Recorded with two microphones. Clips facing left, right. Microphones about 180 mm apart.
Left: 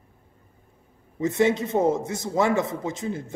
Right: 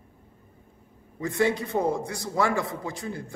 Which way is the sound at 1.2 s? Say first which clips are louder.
Left 4 dB; 20° left (ahead or behind).